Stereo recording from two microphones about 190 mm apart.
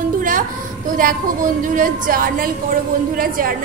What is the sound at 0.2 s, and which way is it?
A woman's voice, 45° right (ahead or behind).